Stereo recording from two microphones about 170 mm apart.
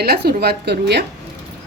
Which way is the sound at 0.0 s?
65° right (ahead or behind).